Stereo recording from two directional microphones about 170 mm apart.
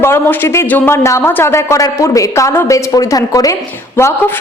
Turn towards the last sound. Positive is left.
turn(degrees=15)  # may be behind; listen again after turning